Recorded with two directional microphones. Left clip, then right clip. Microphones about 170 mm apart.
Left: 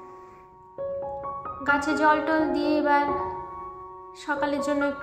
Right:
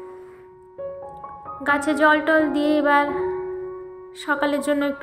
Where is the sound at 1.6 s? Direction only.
25° right (ahead or behind).